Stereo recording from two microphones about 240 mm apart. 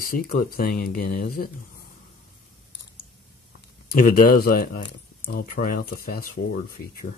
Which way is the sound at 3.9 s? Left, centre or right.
Left.